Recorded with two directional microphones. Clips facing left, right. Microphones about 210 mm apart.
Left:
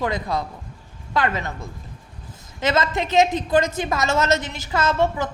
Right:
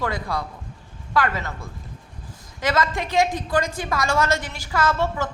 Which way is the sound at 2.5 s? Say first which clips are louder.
Left 2 dB; 25° left (ahead or behind).